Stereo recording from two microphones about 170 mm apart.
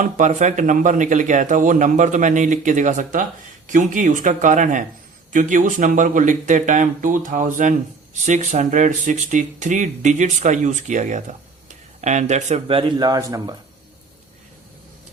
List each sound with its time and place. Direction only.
0.0 s speech: 45° right (ahead or behind); by 13.6 s 20° right (ahead or behind)